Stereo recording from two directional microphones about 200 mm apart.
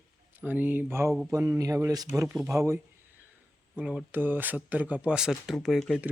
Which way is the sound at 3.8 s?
5° right (ahead or behind).